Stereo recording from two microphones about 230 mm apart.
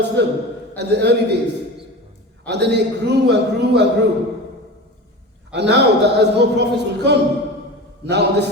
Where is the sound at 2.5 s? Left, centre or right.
Right.